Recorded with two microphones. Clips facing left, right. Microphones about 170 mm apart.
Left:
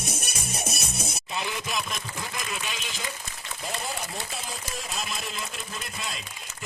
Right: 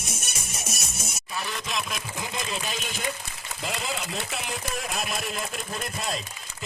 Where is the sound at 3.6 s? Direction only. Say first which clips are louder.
Right 2 dB; 90° right; by 6.2 s 45° right (ahead or behind).